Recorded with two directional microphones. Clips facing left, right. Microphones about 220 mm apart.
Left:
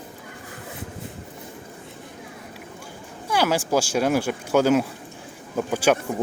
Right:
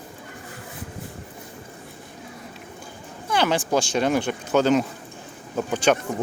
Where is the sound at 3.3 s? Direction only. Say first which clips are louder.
Even; 10° left (ahead or behind).